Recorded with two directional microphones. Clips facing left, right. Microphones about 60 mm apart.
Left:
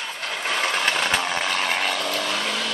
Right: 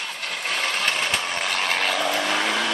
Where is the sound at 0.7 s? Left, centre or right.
Centre.